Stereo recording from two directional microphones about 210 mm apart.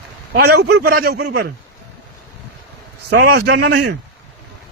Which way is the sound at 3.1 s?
50° right (ahead or behind).